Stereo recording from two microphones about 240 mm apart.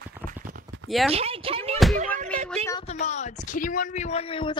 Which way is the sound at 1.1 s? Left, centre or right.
Right.